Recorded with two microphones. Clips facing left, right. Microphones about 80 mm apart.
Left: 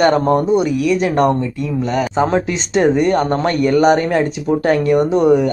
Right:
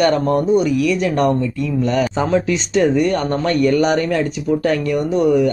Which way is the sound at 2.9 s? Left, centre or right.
Left.